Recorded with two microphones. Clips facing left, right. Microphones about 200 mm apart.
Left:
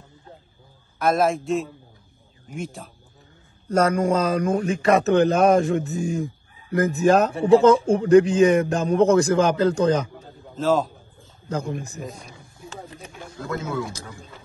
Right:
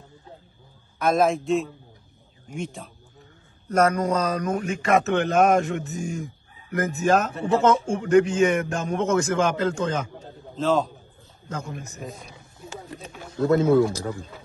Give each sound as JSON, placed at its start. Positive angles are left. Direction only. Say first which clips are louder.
{"t": 0.9, "sound": "a man's voice", "louder": "even", "side_deg": 0}
{"t": 3.6, "sound": "a man's voice", "louder": "left 1 dB", "side_deg": 30}
{"t": 10.5, "sound": "speech", "louder": "left 1 dB", "side_deg": 0}
{"t": 11.4, "sound": "a man's voice", "louder": "left 6 dB", "side_deg": 35}
{"t": 12.0, "sound": "a man's voice", "louder": "left 2 dB", "side_deg": 0}
{"t": 13.6, "sound": "speech", "louder": "right 10 dB", "side_deg": -30}